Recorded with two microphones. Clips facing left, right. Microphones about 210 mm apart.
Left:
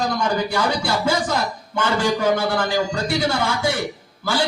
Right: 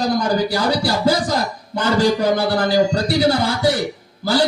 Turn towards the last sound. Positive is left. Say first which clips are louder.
# right 5 dB
turn(degrees=-40)  # may be behind; listen again after turning